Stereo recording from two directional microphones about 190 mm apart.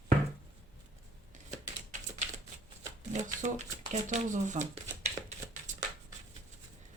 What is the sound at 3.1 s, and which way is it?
Speech, 40° right (ahead or behind).